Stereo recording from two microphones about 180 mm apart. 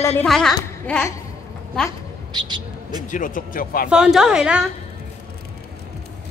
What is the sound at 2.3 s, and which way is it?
Speech, 25° right (ahead or behind).